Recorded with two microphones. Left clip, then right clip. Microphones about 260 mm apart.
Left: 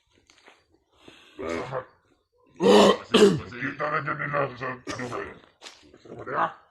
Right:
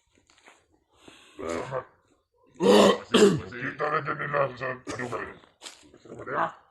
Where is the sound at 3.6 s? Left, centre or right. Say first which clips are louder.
Even; right.